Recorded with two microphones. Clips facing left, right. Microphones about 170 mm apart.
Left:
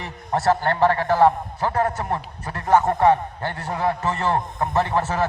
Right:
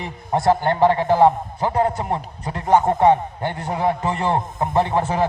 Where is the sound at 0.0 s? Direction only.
15° right (ahead or behind).